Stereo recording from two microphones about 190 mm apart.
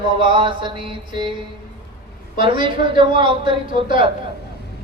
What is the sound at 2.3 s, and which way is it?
Mantra, 25° right (ahead or behind).